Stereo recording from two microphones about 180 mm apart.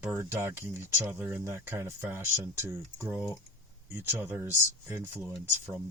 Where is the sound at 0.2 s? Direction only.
15° right (ahead or behind).